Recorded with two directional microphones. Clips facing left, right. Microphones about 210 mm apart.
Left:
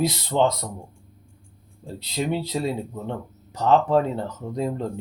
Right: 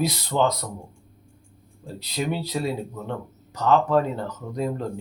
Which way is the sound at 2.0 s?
25° left (ahead or behind).